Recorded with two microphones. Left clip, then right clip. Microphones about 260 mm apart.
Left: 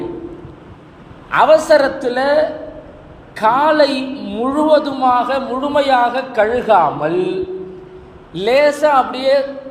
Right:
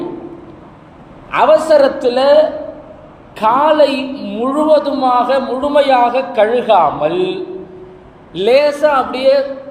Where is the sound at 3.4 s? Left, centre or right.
Left.